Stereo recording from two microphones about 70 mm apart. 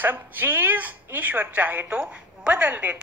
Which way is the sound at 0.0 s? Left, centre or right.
Right.